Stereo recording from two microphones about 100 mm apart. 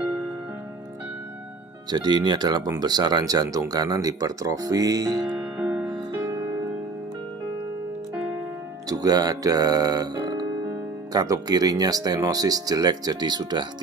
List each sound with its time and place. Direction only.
1.9 s speech: 40° right (ahead or behind)
5.9 s music: 45° right (ahead or behind)
8.8 s speech: 40° right (ahead or behind)